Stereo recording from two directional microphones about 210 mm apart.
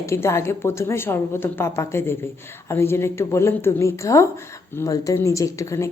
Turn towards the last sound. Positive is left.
turn(degrees=15)  # may be behind; listen again after turning